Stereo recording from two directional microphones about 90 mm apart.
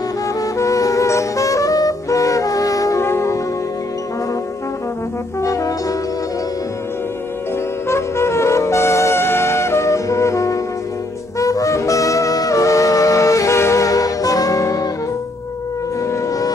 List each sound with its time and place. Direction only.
0.4 s music: 40° left (ahead or behind)
5.4 s brass instrument: 35° left (ahead or behind)
7.9 s music: 30° left (ahead or behind)
16.1 s shofar: 40° left (ahead or behind)